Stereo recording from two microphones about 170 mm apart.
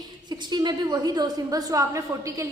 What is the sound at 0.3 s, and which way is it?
A woman's voice, 25° right (ahead or behind).